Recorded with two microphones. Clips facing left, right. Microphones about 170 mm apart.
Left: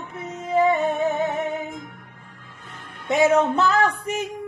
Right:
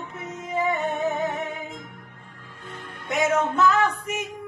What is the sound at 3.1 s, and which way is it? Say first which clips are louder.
Speech: left 5 dB; 30° left (ahead or behind).